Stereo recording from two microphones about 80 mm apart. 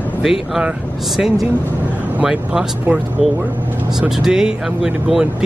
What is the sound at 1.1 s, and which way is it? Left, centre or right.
Speech, centre.